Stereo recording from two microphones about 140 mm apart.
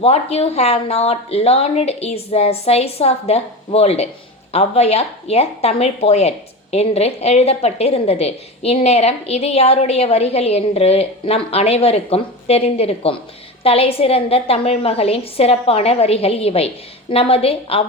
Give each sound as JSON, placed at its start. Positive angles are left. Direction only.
{"t": 0.0, "sound": "speech", "side_deg": 45}